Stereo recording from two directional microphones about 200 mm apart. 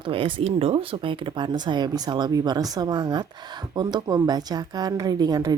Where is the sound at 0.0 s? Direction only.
25° right (ahead or behind).